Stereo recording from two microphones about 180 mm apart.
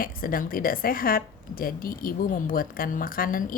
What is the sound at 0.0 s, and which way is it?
A woman's voice, 55° left (ahead or behind).